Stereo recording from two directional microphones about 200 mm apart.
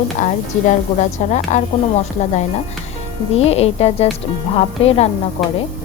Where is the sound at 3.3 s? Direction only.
30° left (ahead or behind).